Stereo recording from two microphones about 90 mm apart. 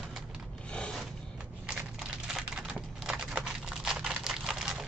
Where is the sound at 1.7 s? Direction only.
5° right (ahead or behind).